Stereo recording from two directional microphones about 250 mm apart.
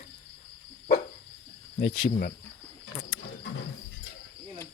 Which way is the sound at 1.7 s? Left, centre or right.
Left.